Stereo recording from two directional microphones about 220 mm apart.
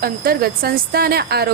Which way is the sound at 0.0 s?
45° right (ahead or behind).